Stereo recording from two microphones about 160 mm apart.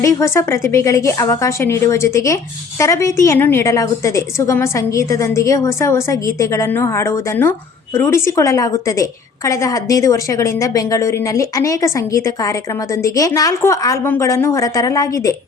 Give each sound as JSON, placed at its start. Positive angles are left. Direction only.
{"t": 0.0, "sound": "a woman's voice", "side_deg": 20}